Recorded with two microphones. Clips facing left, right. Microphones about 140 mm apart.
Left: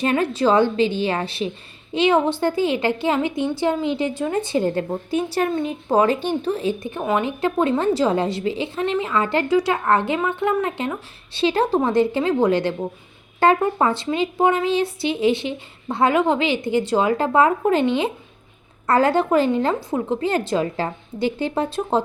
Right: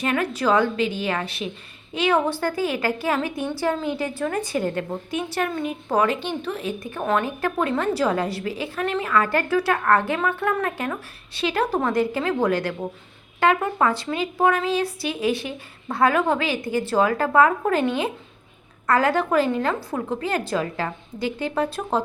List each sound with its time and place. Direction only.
0.0 s speech: 30° left (ahead or behind)
6.1 s speech: 40° left (ahead or behind); by 7.0 s 25° left (ahead or behind)
7.0 s speech: 10° left (ahead or behind)
7.3 s speech: 20° left (ahead or behind)